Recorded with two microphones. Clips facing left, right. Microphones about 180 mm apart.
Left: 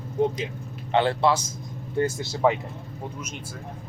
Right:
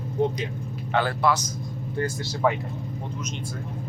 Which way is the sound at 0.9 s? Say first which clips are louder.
Left 2 dB; 25° left (ahead or behind).